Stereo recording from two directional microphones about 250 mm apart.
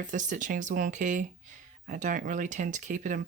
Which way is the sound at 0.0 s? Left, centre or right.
Right.